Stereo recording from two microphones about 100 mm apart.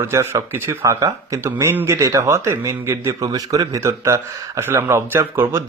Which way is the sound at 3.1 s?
35° right (ahead or behind).